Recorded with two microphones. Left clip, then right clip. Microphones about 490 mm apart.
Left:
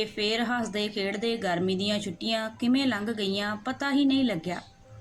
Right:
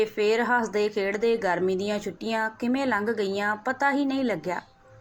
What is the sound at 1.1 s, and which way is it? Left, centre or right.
Speech, left.